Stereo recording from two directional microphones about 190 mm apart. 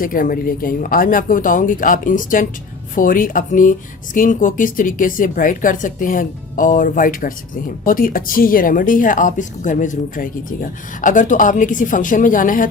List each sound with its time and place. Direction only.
0.0 s speech: 45° left (ahead or behind)